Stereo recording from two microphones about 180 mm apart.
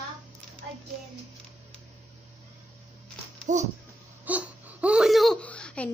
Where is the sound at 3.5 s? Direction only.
40° right (ahead or behind).